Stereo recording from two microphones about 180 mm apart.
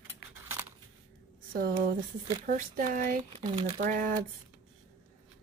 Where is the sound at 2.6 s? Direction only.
50° right (ahead or behind).